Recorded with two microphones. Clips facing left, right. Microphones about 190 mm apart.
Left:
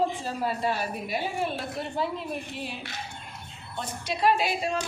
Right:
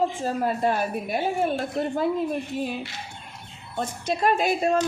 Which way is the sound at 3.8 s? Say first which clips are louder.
Right 4 dB; 45° right (ahead or behind).